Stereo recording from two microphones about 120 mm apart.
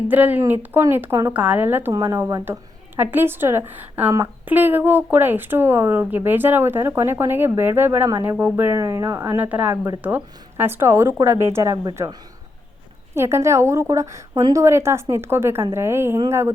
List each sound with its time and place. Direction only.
0.1 s a woman's voice: 15° right (ahead or behind)
9.2 s a woman's voice: 15° right (ahead or behind)
13.1 s a woman's voice: 20° right (ahead or behind)